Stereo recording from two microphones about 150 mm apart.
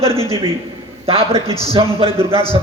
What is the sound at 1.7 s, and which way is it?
Speech, 40° right (ahead or behind).